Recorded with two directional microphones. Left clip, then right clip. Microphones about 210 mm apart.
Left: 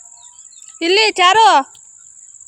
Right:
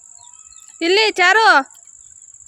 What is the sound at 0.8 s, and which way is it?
Speech, centre (ahead or behind).